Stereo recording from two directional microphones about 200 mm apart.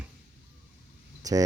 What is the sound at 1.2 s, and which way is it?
Speech, 20° right (ahead or behind).